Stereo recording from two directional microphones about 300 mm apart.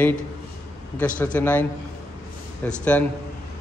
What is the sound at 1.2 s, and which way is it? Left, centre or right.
A man's voice, centre.